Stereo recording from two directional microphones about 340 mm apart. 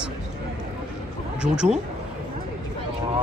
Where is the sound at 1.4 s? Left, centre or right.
Centre.